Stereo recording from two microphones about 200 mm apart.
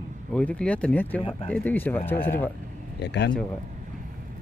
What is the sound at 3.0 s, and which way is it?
Speech, 60° left (ahead or behind).